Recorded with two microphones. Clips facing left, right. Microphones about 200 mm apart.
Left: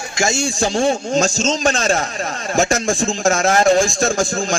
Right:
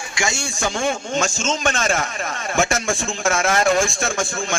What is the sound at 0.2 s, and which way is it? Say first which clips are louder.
Speech: left 6 dB; 35° left (ahead or behind).